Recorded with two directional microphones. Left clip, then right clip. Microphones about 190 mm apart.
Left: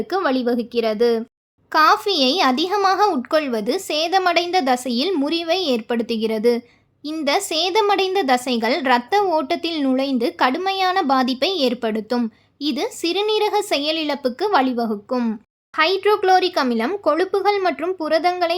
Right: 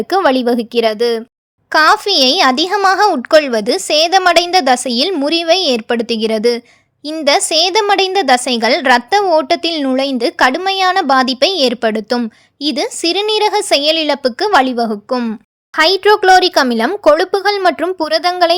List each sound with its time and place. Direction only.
0.1 s a child's voice: 40° right (ahead or behind)
15.7 s a child's voice: 40° right (ahead or behind)